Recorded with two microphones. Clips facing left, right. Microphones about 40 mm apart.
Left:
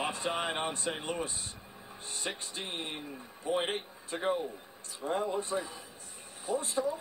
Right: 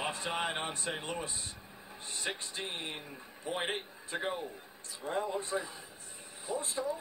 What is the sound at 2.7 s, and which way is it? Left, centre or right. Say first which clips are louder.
Speech: left 2 dB; left.